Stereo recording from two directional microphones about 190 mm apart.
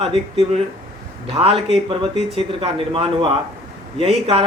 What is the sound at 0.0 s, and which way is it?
Speech, 30° right (ahead or behind).